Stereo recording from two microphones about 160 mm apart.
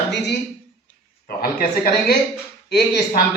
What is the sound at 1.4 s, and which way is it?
Speech, 70° left (ahead or behind).